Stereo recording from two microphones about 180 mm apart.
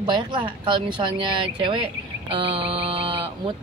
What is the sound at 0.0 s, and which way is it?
Speech, 25° right (ahead or behind).